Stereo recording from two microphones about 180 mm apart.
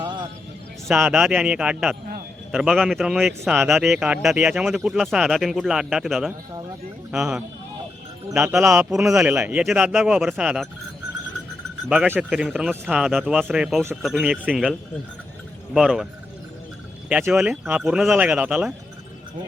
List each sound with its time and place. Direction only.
0.0 s music: 25° right (ahead or behind)
0.9 s speech: 10° right (ahead or behind)
11.9 s speech: 10° right (ahead or behind)
17.1 s speech: 5° right (ahead or behind)